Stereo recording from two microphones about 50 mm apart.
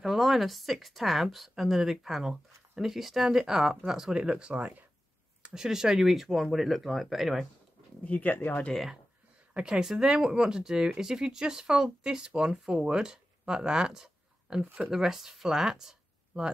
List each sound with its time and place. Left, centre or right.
0.0 s speech: centre; by 4.8 s right
5.4 s speech: centre
8.0 s speech: left
9.5 s speech: centre